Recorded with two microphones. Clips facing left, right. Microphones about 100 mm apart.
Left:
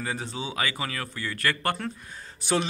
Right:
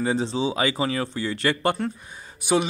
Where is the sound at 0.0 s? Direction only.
25° right (ahead or behind).